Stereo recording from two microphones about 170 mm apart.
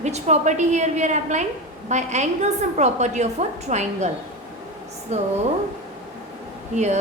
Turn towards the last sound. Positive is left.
turn(degrees=-40)  # may be behind; listen again after turning